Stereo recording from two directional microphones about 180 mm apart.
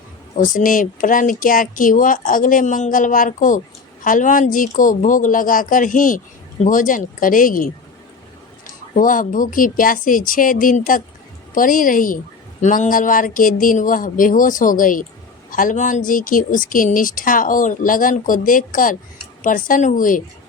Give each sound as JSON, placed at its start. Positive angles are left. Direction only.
{"t": 0.3, "sound": "speech", "side_deg": 50}
{"t": 9.0, "sound": "speech", "side_deg": 50}